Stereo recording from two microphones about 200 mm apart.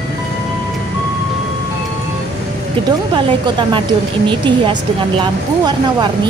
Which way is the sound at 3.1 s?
25° right (ahead or behind).